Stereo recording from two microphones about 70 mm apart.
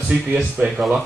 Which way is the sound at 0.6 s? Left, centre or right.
Right.